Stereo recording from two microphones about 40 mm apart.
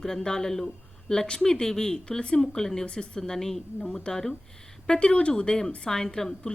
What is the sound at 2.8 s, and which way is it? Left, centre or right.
Speech, left.